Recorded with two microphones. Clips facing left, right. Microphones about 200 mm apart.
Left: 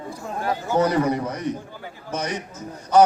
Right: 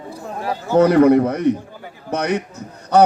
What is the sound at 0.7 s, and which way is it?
A man's voice, 65° right (ahead or behind).